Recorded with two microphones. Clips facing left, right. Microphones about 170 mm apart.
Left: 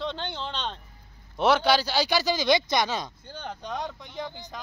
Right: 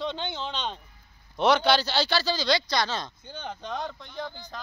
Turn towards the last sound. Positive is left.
turn(degrees=20)  # may be behind; listen again after turning